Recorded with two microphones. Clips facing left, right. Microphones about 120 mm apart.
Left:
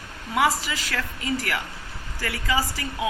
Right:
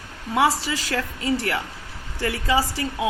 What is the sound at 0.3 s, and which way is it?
Speech, 30° right (ahead or behind).